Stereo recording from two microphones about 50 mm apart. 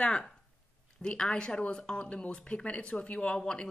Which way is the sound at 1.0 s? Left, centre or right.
Centre.